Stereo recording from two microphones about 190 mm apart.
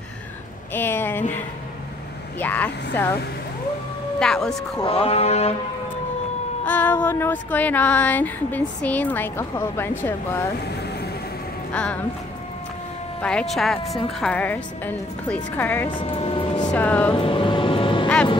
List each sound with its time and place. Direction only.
0.7 s speech: 10° left (ahead or behind)
2.3 s speech: 10° left (ahead or behind)
4.2 s speech: 5° left (ahead or behind)
4.7 s speech: 30° left (ahead or behind)
6.6 s speech: 10° left (ahead or behind)
11.7 s speech: 5° left (ahead or behind)
13.2 s speech: 5° left (ahead or behind)
15.9 s speech: 25° left (ahead or behind)
16.7 s speech: 10° left (ahead or behind)
17.1 s vehicle: 25° left (ahead or behind)
18.0 s vehicle: 5° left (ahead or behind)